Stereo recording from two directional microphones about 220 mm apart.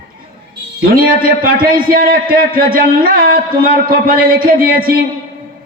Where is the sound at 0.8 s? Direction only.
40° right (ahead or behind).